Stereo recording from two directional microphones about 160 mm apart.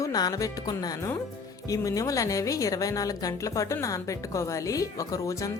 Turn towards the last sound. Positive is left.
turn(degrees=20)  # may be behind; listen again after turning